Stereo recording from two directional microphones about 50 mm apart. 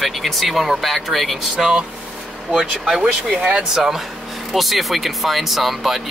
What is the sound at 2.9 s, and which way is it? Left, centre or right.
Speech, centre.